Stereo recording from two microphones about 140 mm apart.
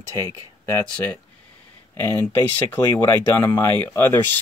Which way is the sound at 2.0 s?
15° left (ahead or behind).